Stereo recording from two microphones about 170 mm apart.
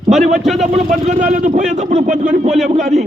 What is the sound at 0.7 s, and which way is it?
A man's voice, 45° right (ahead or behind).